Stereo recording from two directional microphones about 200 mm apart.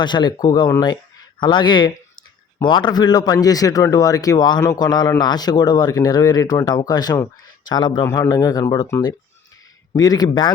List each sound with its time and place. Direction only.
0.0 s a man's voice: 20° left (ahead or behind)